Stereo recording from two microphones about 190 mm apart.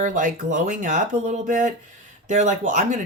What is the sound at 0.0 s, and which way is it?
Speech, 40° right (ahead or behind).